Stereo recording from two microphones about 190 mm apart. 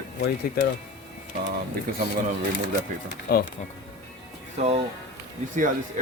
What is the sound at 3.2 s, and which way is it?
Speech, 55° left (ahead or behind).